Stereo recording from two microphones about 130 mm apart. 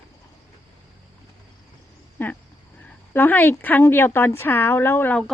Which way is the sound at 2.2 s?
15° left (ahead or behind).